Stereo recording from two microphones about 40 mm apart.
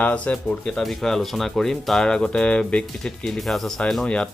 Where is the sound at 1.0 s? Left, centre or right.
Centre.